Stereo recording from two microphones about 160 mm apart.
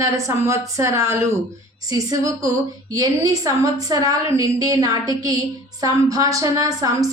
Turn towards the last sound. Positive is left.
turn(degrees=-20)  # may be behind; listen again after turning